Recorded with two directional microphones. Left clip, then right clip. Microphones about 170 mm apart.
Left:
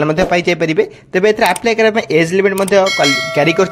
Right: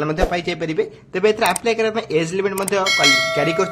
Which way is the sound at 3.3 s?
35° left (ahead or behind).